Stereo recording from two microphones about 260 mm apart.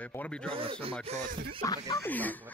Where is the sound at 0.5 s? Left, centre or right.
Right.